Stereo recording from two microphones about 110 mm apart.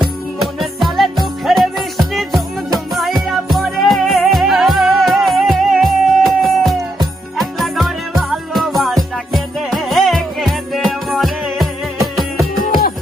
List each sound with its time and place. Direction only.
0.6 s music: centre (ahead or behind)